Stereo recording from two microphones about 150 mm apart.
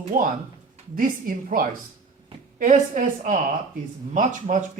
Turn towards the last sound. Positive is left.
turn(degrees=-60)  # may be behind; listen again after turning